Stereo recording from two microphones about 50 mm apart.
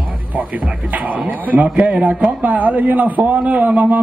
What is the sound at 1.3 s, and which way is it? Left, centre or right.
Speech, right.